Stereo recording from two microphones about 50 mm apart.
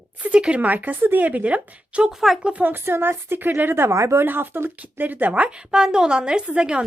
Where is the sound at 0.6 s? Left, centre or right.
Right.